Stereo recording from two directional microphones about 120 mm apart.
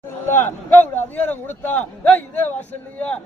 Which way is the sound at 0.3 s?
15° left (ahead or behind).